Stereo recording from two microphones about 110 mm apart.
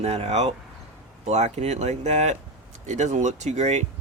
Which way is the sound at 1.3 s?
90° right.